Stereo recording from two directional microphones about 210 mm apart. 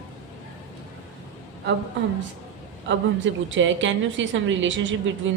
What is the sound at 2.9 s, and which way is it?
A woman's voice, 65° right (ahead or behind).